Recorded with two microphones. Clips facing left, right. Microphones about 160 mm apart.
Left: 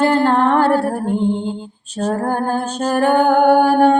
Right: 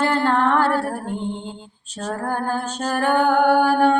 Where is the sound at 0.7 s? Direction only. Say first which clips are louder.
Left 6 dB; 15° left (ahead or behind).